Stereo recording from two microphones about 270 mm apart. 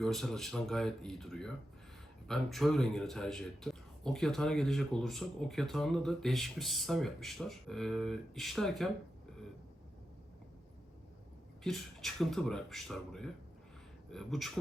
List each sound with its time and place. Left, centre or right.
0.0 s a man's voice: centre
11.6 s a man's voice: centre